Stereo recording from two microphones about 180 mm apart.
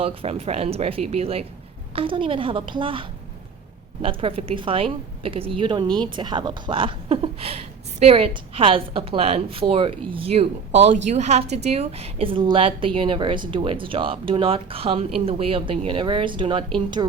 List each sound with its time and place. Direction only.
0.0 s a woman's voice: 30° right (ahead or behind)